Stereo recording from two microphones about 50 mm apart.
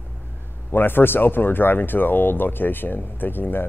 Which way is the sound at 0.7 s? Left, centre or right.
Left.